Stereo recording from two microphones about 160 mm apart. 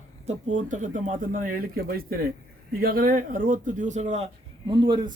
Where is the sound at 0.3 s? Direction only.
50° right (ahead or behind).